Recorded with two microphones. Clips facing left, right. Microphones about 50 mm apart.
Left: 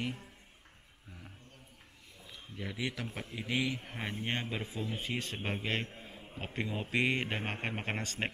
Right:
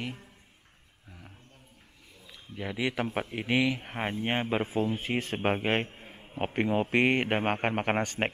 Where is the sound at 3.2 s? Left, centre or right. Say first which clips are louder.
Right 7 dB; right.